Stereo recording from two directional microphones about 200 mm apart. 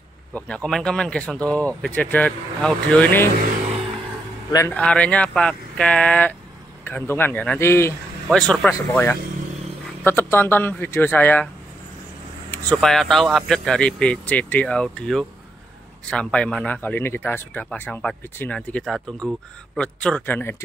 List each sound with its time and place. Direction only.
0.3 s a man's voice: 5° left (ahead or behind)
4.5 s speech: 15° left (ahead or behind)
4.7 s a man's voice: 5° left (ahead or behind)
12.4 s a man's voice: 5° left (ahead or behind)